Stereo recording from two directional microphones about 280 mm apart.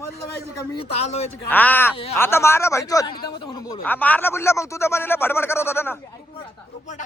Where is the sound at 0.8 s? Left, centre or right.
Left.